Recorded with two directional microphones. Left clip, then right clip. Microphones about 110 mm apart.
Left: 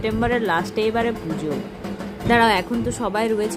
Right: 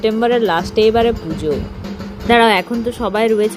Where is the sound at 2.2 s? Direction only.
25° right (ahead or behind).